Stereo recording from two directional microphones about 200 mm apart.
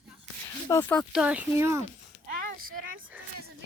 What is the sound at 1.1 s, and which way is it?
Speech, 5° right (ahead or behind).